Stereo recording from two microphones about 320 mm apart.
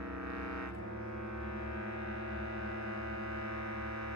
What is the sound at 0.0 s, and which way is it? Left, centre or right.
Music, right.